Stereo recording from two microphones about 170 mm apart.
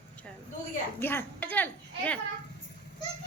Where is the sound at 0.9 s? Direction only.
10° left (ahead or behind).